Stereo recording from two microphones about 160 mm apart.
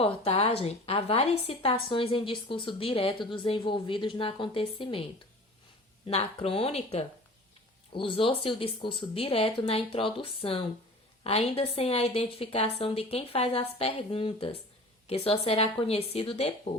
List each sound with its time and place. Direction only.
0.0 s a woman's voice: 40° left (ahead or behind)
6.1 s a woman's voice: 40° left (ahead or behind)